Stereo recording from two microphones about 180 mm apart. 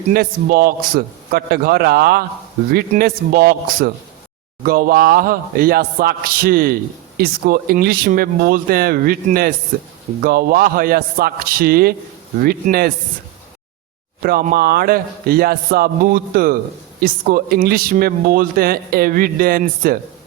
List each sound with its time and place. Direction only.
0.1 s a man's voice: 55° right (ahead or behind)
14.2 s speech: 55° right (ahead or behind)